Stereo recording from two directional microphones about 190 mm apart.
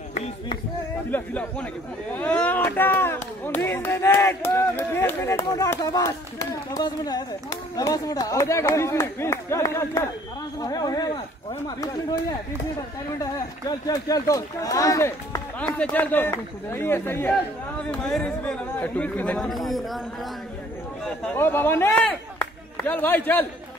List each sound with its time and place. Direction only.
0.1 s a sound: 35° left (ahead or behind)
1.1 s speech: 10° left (ahead or behind)
13.2 s speech: 20° left (ahead or behind); by 20.0 s centre (ahead or behind)
21.0 s speech: 5° left (ahead or behind)